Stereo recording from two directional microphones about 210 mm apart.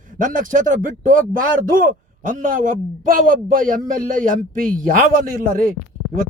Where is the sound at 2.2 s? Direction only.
40° right (ahead or behind).